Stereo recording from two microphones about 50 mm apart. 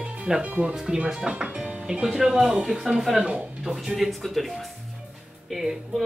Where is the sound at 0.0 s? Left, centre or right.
Right.